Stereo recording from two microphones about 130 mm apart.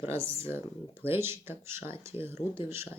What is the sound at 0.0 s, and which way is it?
Speech, 20° right (ahead or behind).